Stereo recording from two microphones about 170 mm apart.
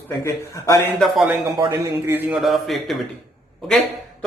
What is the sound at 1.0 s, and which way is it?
Speech, centre (ahead or behind).